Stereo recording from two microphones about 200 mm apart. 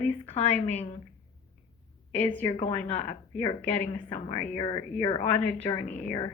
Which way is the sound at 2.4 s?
30° left (ahead or behind).